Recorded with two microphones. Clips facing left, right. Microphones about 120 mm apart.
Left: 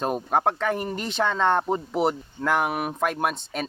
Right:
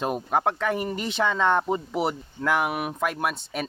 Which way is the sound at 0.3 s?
40° left (ahead or behind).